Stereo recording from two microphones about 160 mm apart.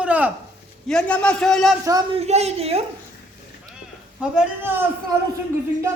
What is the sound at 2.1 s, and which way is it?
Speech, 40° right (ahead or behind).